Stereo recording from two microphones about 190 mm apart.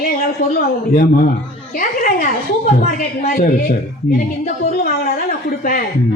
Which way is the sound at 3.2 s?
50° left (ahead or behind).